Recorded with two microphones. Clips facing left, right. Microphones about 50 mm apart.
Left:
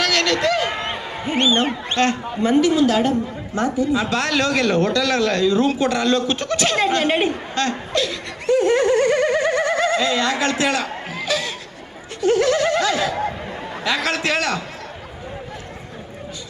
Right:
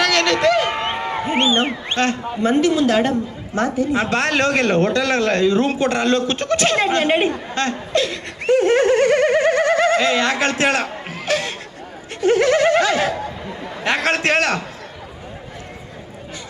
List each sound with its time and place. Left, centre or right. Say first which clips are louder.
0.0 s a sound: right 3 dB; right
2.4 s a man's voice: even; right
3.9 s a man's voice: right 2 dB; right
7.2 s laughter: right 1 dB; right
12.4 s a sound: right 3 dB; right
13.8 s a man's voice: right 3 dB; right